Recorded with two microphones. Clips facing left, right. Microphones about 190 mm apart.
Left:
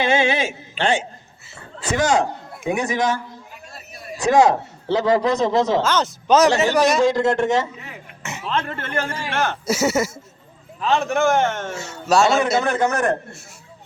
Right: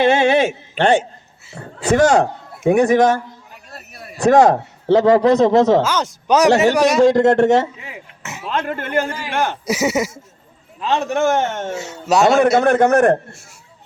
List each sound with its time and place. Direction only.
0.0 s a man's voice: 60° right (ahead or behind)
3.7 s a sound: 55° right (ahead or behind)
5.4 s a man's voice: 45° right (ahead or behind)
5.8 s speech: 10° right (ahead or behind)
7.0 s a man's voice: 65° right (ahead or behind)
8.2 s throat clearing: 5° right (ahead or behind)
8.5 s a man's voice: 15° right (ahead or behind)
12.5 s a man's voice: 60° right (ahead or behind)